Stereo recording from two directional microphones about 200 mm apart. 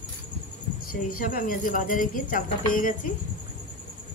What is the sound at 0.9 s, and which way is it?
Speech, 45° left (ahead or behind).